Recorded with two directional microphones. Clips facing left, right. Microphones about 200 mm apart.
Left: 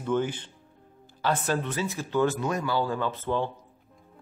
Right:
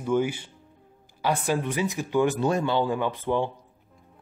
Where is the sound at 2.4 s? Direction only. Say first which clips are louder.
Right 4 dB; 25° right (ahead or behind).